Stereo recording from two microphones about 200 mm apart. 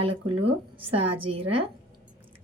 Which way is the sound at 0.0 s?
30° right (ahead or behind).